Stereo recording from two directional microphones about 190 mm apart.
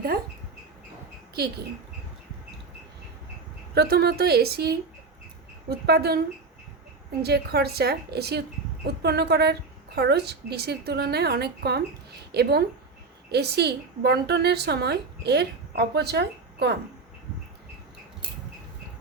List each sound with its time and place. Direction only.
1.4 s a woman's voice: 55° right (ahead or behind)
3.8 s a woman's voice: 55° right (ahead or behind)
7.2 s a woman's voice: 55° right (ahead or behind)